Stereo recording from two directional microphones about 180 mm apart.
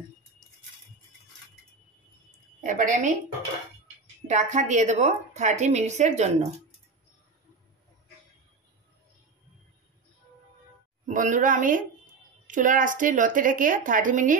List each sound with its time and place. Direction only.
2.6 s a woman's voice: 45° right (ahead or behind)
4.3 s a woman's voice: 40° right (ahead or behind)
11.1 s a woman's voice: 45° right (ahead or behind)